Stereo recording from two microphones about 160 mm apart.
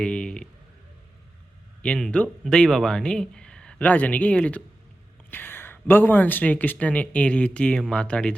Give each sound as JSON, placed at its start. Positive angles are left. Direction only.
{"t": 0.0, "sound": "speech", "side_deg": 5}
{"t": 1.8, "sound": "speech", "side_deg": 5}